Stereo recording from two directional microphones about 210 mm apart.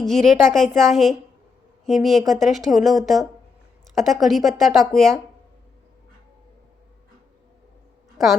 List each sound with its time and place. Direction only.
0.0 s a woman's voice: centre (ahead or behind)